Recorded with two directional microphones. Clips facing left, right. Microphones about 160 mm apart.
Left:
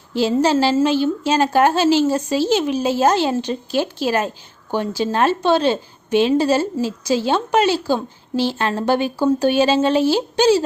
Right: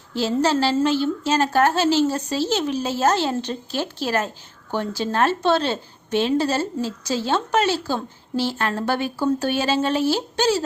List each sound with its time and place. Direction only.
0.1 s a woman's voice: 15° left (ahead or behind)